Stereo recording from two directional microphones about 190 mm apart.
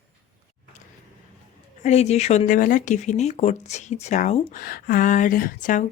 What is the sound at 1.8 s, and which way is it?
A woman's voice, 35° left (ahead or behind).